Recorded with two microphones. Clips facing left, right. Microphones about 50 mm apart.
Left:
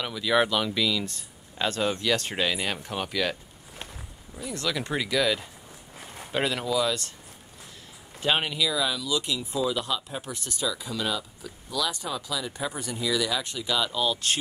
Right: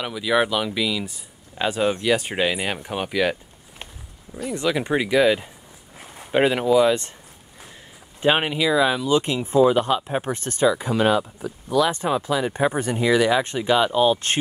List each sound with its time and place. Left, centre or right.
0.0 s speech: centre
4.5 s speech: right
8.2 s speech: right